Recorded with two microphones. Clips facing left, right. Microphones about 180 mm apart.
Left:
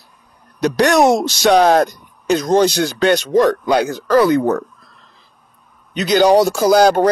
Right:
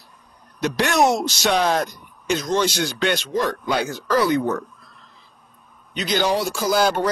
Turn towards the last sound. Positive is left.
turn(degrees=45)  # may be behind; listen again after turning